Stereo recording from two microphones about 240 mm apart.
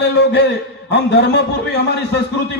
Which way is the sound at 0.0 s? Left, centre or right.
Left.